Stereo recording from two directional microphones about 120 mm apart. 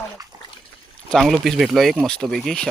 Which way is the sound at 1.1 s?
Centre (ahead or behind).